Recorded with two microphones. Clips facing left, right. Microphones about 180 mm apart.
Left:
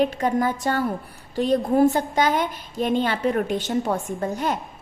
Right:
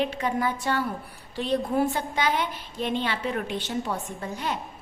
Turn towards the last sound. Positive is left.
turn(degrees=45)  # may be behind; listen again after turning